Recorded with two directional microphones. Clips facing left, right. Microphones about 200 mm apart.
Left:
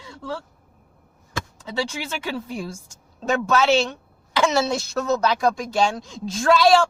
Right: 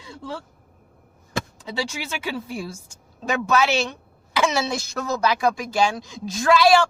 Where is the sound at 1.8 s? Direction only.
10° right (ahead or behind).